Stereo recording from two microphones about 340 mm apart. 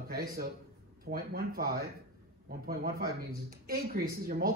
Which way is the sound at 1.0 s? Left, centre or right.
Right.